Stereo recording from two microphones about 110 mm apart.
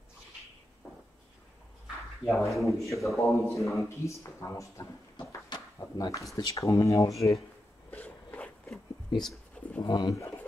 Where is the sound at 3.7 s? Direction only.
25° left (ahead or behind).